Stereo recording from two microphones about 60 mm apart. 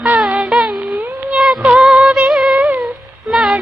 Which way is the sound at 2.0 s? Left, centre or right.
Right.